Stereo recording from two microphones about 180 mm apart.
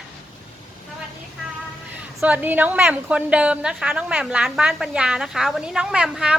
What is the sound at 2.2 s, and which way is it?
A woman's voice, 10° right (ahead or behind).